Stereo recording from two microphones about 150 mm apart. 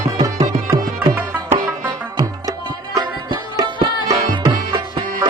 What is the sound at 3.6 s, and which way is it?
Music, 25° right (ahead or behind).